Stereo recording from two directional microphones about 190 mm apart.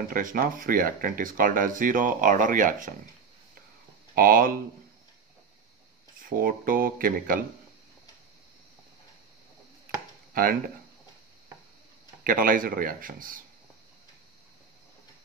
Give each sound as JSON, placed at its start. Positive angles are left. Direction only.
{"t": 0.1, "sound": "speech", "side_deg": -45}
{"t": 4.1, "sound": "speech", "side_deg": -50}
{"t": 6.2, "sound": "speech", "side_deg": -50}
{"t": 10.3, "sound": "speech", "side_deg": -50}
{"t": 12.2, "sound": "speech", "side_deg": -50}